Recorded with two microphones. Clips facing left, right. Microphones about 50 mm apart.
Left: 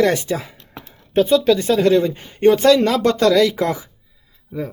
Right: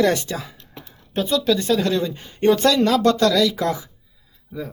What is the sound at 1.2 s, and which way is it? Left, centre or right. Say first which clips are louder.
Speech: left 5 dB; left.